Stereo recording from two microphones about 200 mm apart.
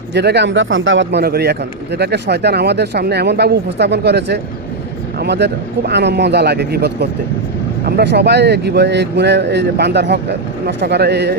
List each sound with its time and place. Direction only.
0.1 s speech: 55° right (ahead or behind)